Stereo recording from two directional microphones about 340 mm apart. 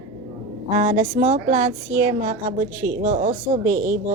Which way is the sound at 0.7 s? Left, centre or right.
Right.